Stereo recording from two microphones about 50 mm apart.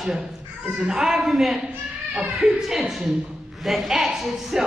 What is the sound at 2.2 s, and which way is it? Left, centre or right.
Speech, centre.